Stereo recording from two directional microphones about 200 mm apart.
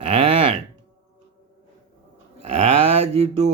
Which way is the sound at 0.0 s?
30° right (ahead or behind).